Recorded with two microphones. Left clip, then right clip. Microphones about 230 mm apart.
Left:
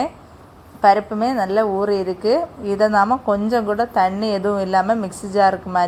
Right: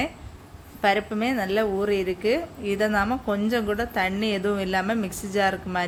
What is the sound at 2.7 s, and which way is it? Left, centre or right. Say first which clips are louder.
Speech: left 8 dB; centre.